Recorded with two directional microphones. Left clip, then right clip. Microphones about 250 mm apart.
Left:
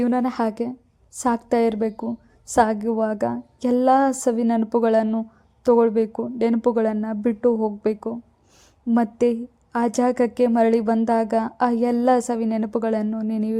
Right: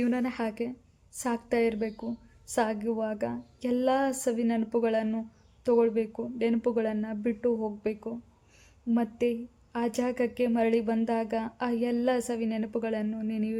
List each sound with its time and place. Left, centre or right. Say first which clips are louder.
0.0 s a woman's voice: left 8 dB; centre